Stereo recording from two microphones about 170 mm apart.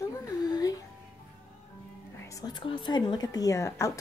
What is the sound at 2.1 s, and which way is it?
A woman's voice, 20° left (ahead or behind).